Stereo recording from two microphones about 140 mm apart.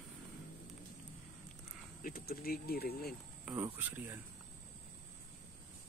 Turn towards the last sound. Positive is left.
turn(degrees=-15)  # may be behind; listen again after turning